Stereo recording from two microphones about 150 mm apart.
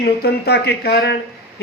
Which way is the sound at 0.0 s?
90° left.